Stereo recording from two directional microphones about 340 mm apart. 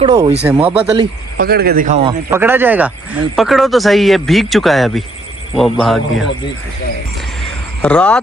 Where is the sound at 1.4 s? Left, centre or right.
Right.